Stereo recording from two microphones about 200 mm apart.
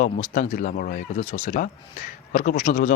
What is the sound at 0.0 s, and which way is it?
Speech, 40° left (ahead or behind).